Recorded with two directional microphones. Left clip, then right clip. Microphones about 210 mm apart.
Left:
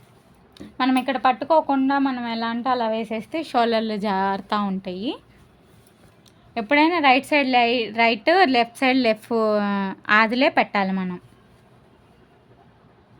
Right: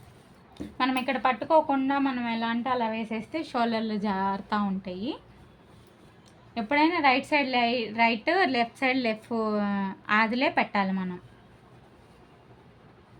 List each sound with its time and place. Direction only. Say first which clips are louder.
0.5 s speech: left 5 dB; 40° left (ahead or behind)
6.5 s a woman's voice: left 6 dB; 50° left (ahead or behind)